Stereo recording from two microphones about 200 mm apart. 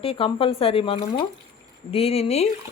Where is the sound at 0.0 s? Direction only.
30° left (ahead or behind).